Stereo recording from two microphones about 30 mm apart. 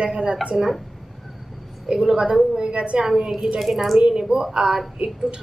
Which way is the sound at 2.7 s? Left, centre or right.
Right.